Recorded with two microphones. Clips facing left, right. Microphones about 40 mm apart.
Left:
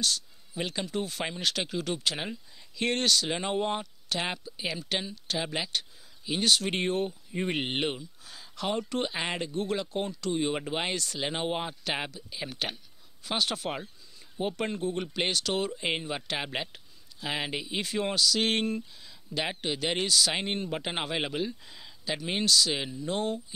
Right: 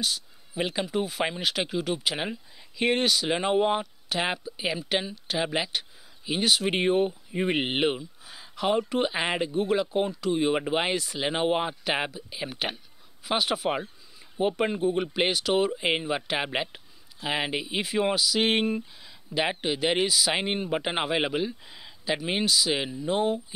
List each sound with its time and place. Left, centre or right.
0.0 s speech: centre